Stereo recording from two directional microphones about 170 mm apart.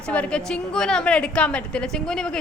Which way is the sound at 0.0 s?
5° left (ahead or behind).